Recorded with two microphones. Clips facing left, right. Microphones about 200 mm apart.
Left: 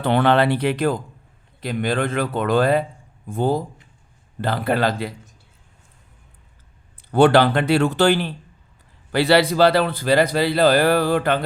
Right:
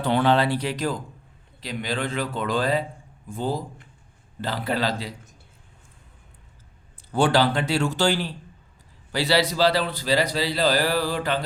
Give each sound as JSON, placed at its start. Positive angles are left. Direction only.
{"t": 0.0, "sound": "a man's voice", "side_deg": 60}
{"t": 7.1, "sound": "a man's voice", "side_deg": 60}